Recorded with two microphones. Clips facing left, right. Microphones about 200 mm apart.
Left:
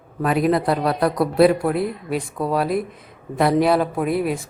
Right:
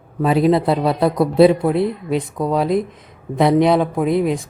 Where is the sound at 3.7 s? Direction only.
5° left (ahead or behind).